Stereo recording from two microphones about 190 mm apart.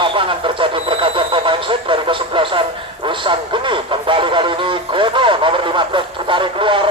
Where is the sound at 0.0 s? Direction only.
25° right (ahead or behind).